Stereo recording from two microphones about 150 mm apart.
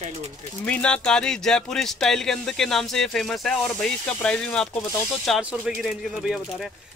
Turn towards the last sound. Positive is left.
turn(degrees=0)  # may be behind; listen again after turning